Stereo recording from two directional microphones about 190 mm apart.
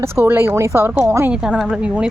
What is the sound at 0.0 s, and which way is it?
Speech, 15° right (ahead or behind).